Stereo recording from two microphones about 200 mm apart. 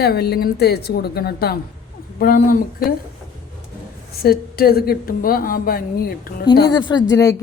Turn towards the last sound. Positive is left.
turn(degrees=15)  # may be behind; listen again after turning